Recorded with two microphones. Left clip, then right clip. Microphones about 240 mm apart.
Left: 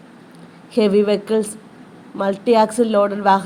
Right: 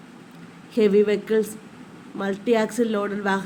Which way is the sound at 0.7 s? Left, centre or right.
Centre.